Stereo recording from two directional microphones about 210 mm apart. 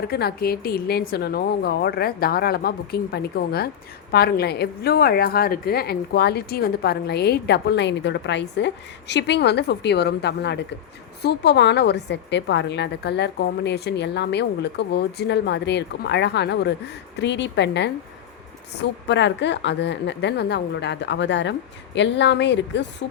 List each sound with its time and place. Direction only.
0.1 s a woman's voice: 50° left (ahead or behind)